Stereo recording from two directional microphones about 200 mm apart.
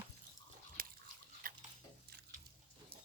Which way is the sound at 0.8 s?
45° right (ahead or behind).